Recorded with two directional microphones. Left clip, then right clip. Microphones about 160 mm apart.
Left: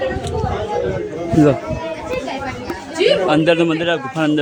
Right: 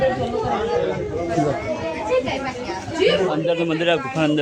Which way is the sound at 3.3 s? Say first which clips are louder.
Left 7 dB; 45° left (ahead or behind).